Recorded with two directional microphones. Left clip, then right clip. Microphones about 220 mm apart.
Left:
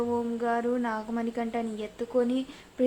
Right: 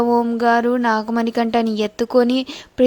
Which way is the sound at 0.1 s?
45° right (ahead or behind).